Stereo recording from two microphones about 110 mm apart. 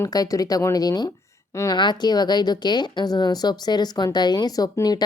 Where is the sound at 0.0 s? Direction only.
35° left (ahead or behind).